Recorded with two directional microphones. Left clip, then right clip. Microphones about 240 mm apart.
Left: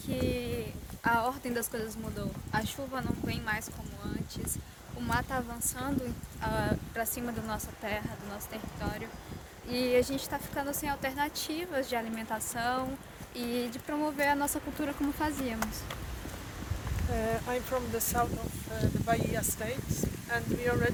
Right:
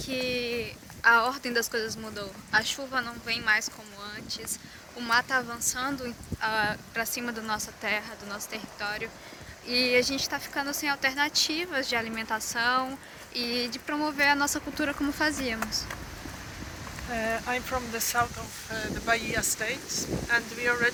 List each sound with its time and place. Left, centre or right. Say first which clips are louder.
0.0 s a woman's voice: right 4 dB; centre
17.2 s speech: right 3 dB; left; by 20.9 s centre